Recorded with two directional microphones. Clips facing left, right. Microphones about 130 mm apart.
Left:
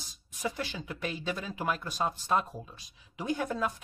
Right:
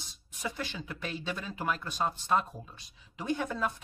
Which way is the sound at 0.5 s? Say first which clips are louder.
Left 2 dB; 10° left (ahead or behind).